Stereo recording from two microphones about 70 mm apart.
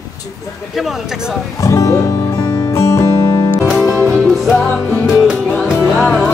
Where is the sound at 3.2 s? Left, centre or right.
Left.